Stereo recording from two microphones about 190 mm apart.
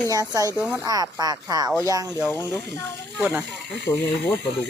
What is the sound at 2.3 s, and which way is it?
Speech, 15° left (ahead or behind).